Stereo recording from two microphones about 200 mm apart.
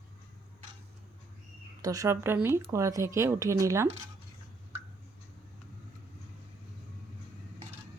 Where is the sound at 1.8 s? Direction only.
15° right (ahead or behind).